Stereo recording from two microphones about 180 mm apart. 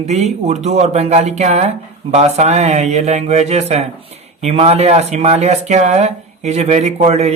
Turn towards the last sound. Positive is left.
turn(degrees=-40)  # may be behind; listen again after turning